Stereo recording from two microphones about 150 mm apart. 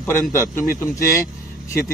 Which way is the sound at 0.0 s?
20° left (ahead or behind).